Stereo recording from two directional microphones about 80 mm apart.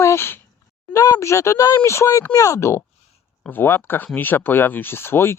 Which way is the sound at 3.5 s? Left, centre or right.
Left.